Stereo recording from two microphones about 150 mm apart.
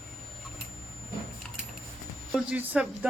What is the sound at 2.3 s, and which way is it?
Speech, 10° right (ahead or behind).